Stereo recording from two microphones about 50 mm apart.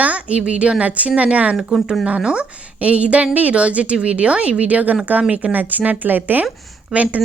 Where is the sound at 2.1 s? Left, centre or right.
Right.